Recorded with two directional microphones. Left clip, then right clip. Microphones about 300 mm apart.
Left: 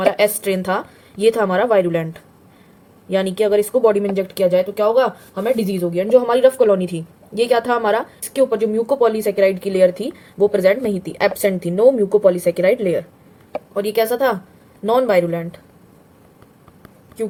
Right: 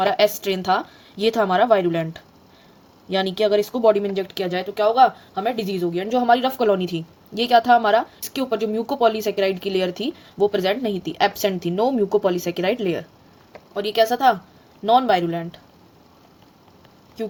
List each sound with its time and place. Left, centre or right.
0.2 s a woman's voice: centre
3.1 s speech: centre